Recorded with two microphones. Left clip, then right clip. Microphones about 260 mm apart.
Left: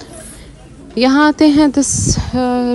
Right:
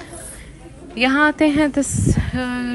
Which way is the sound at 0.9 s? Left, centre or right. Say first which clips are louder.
Left 4 dB; centre.